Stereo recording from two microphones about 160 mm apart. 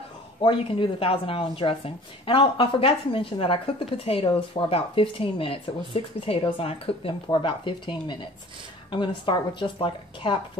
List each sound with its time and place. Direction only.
0.4 s speech: 35° left (ahead or behind)